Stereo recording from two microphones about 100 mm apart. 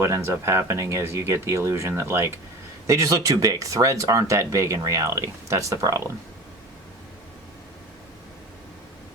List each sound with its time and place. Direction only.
0.0 s speech: 30° right (ahead or behind)